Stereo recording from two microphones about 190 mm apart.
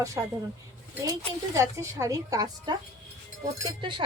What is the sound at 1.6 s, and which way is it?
A woman's voice, 15° right (ahead or behind).